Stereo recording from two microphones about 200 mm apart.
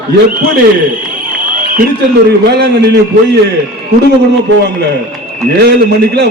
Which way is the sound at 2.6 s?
55° right (ahead or behind).